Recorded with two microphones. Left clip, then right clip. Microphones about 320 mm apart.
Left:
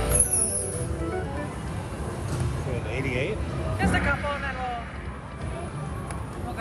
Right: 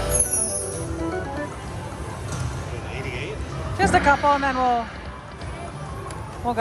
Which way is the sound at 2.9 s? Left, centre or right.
Centre.